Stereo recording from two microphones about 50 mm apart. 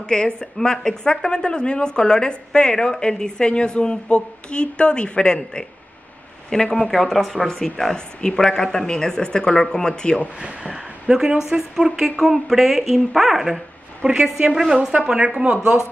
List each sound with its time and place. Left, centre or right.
0.0 s speech: centre
10.6 s speech: centre
14.9 s speech: centre